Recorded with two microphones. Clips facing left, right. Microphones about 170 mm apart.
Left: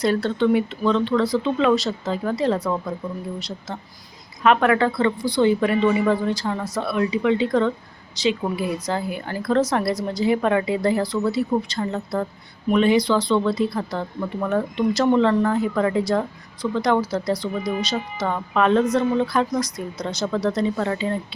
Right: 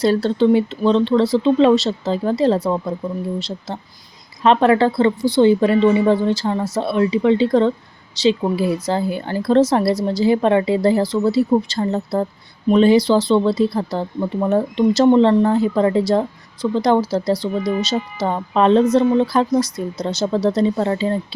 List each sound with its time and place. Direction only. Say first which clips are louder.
0.0 s a woman's voice: right 4 dB; 30° right (ahead or behind)